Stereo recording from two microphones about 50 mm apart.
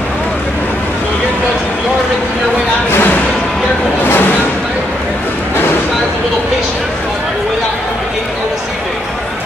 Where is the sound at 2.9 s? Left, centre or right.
Left.